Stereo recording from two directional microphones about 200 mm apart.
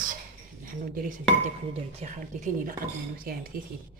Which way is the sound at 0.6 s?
45° right (ahead or behind).